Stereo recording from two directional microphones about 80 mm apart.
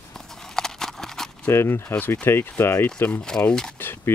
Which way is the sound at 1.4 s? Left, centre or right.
Left.